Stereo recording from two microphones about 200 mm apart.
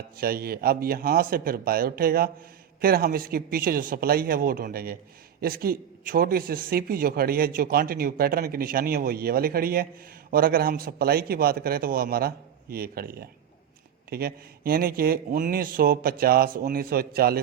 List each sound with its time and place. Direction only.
0.2 s a man's voice: 50° right (ahead or behind)